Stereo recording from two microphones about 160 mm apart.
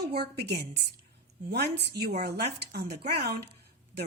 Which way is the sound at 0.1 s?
80° right.